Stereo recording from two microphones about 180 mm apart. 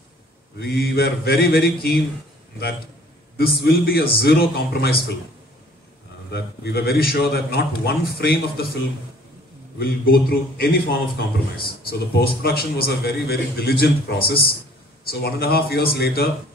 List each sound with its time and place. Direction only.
0.6 s speech: 60° left (ahead or behind)
3.3 s speech: 60° left (ahead or behind)
6.3 s speech: 60° left (ahead or behind)
9.8 s speech: 60° left (ahead or behind)